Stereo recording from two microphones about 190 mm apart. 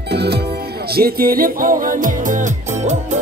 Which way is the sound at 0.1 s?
60° right (ahead or behind).